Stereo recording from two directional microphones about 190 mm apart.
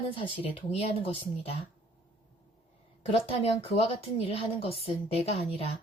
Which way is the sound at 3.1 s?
30° left (ahead or behind).